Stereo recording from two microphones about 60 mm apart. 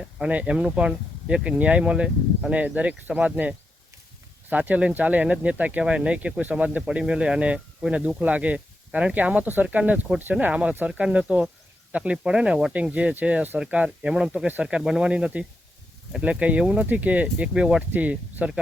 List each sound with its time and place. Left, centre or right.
0.2 s speech: centre
6.8 s speech: centre
17.9 s speech: right